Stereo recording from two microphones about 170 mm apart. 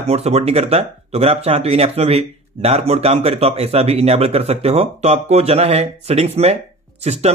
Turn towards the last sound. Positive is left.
turn(degrees=-40)  # may be behind; listen again after turning